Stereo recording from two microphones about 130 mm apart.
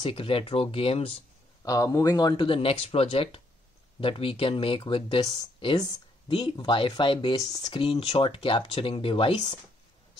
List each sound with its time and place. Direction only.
0.0 s speech: 45° left (ahead or behind)
1.6 s speech: 25° left (ahead or behind)
7.8 s speech: 45° left (ahead or behind)